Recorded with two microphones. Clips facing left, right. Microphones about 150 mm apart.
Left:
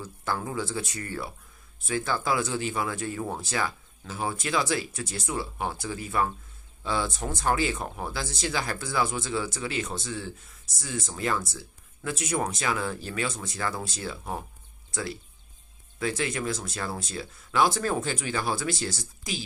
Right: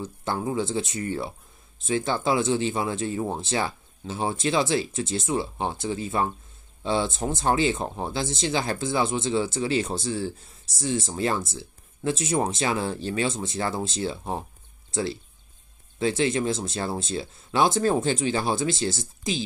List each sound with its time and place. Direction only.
0.0 s speech: 25° right (ahead or behind)